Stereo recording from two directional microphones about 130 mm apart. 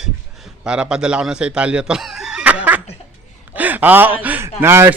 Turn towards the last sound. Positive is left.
turn(degrees=-15)  # may be behind; listen again after turning